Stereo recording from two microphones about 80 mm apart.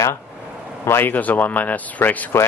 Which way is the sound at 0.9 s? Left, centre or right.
Left.